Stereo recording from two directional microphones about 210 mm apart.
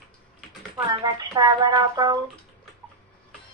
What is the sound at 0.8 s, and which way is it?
Speech, 20° right (ahead or behind).